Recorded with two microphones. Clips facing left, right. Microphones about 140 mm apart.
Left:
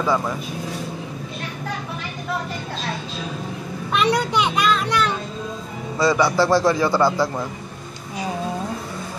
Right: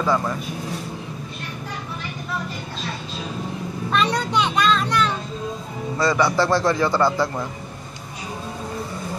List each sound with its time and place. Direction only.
0.0 s speech: 5° left (ahead or behind)
3.9 s a man's voice: 10° left (ahead or behind)